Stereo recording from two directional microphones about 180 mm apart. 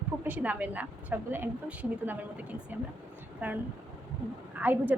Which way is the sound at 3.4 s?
10° right (ahead or behind).